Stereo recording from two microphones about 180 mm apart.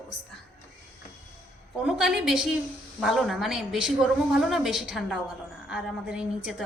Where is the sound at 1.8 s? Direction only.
5° right (ahead or behind).